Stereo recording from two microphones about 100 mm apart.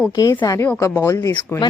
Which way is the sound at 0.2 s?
35° left (ahead or behind).